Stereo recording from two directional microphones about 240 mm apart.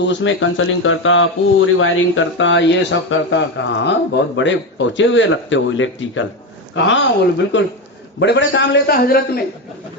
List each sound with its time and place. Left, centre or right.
0.0 s speech: left